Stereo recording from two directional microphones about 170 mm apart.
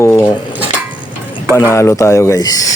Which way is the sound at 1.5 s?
15° left (ahead or behind).